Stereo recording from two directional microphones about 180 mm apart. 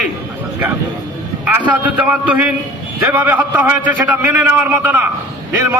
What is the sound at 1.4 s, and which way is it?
A man's voice, 10° right (ahead or behind).